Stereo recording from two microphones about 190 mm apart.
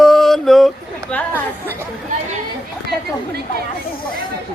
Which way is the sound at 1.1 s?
5° left (ahead or behind).